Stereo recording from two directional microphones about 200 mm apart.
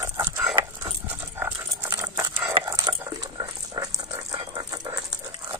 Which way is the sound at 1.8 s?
15° right (ahead or behind).